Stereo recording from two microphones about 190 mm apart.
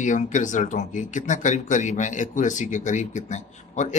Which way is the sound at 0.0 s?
40° left (ahead or behind).